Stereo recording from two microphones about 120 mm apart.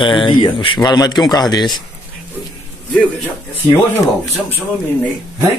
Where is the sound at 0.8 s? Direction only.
35° left (ahead or behind).